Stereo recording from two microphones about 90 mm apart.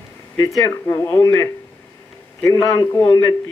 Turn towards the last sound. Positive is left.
turn(degrees=45)  # may be behind; listen again after turning